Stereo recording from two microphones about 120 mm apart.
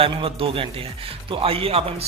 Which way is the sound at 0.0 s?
50° right (ahead or behind).